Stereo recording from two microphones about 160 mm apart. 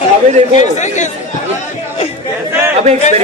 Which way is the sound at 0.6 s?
50° left (ahead or behind).